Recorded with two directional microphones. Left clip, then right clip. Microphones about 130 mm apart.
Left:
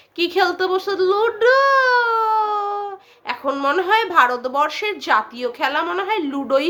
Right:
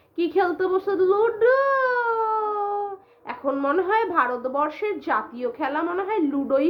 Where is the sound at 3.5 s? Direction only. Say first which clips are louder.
Left 4 dB; 15° left (ahead or behind).